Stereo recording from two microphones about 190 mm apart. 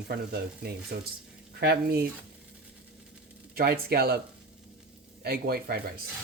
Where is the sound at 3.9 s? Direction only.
55° right (ahead or behind).